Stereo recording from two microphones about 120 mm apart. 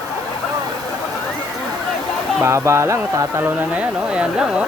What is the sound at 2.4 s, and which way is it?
Music, 25° right (ahead or behind).